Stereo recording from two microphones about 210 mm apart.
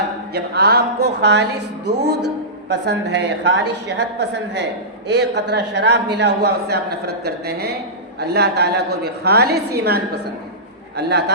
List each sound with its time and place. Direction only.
0.3 s a woman's voice: 50° right (ahead or behind)